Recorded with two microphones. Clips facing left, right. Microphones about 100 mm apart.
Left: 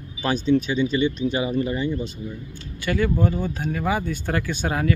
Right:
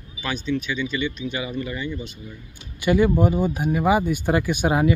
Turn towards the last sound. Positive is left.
turn(degrees=-15)  # may be behind; listen again after turning